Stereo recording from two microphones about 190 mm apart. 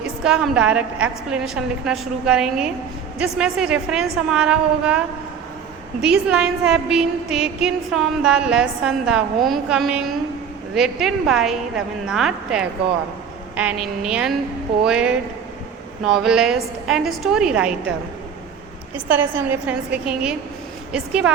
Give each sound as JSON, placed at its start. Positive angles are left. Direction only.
{"t": 0.3, "sound": "a woman's voice", "side_deg": -5}
{"t": 18.9, "sound": "a woman's voice", "side_deg": -10}